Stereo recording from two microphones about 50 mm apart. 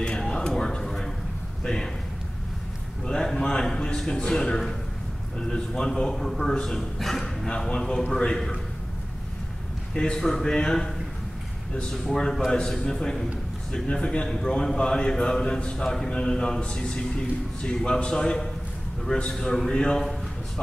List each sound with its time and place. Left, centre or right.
0.0 s a sound: centre
1.6 s speech: centre
3.1 s a sound: centre
5.4 s a man's voice: centre
7.4 s a man's voice: centre
9.9 s a man's voice: centre